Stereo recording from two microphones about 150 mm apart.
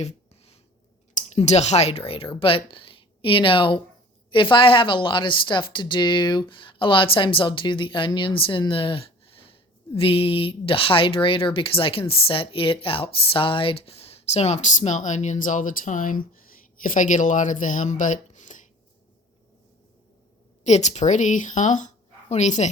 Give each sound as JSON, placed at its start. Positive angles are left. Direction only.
{"t": 0.0, "sound": "a sound", "side_deg": 40}
{"t": 1.1, "sound": "a woman's voice", "side_deg": 50}
{"t": 20.7, "sound": "speech", "side_deg": 50}